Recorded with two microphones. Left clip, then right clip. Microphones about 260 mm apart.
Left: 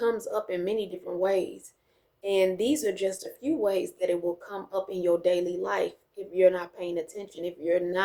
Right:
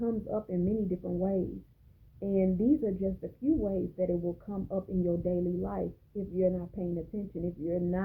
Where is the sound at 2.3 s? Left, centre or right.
Left.